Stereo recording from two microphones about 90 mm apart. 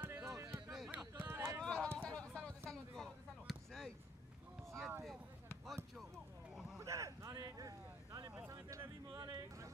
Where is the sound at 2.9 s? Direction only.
5° left (ahead or behind).